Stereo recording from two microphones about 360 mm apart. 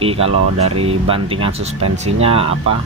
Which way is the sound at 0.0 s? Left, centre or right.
Centre.